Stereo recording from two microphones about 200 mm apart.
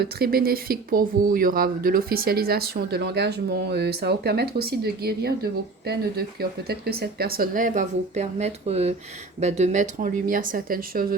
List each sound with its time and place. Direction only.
0.0 s speech: 50° right (ahead or behind)